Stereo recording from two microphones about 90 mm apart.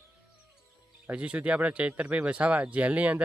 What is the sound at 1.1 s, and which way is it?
Speech, 15° right (ahead or behind).